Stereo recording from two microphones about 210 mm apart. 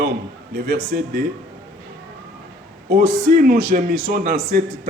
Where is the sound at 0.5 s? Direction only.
50° right (ahead or behind).